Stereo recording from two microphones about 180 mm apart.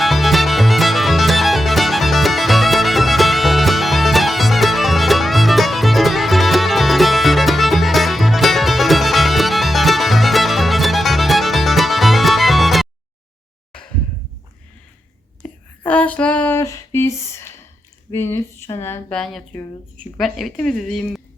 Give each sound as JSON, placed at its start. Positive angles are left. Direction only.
{"t": 0.0, "sound": "music", "side_deg": 0}
{"t": 15.4, "sound": "a sound", "side_deg": 10}
{"t": 18.1, "sound": "speech", "side_deg": 15}
{"t": 20.1, "sound": "speech", "side_deg": 0}